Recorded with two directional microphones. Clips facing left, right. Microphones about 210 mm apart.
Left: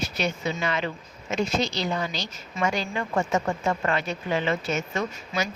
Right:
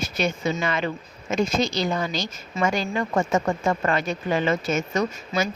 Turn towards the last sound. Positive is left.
turn(degrees=-45)  # may be behind; listen again after turning